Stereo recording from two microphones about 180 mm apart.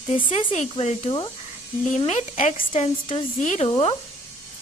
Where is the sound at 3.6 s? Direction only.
25° left (ahead or behind).